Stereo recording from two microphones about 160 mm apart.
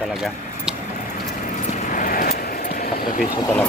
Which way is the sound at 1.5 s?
50° left (ahead or behind).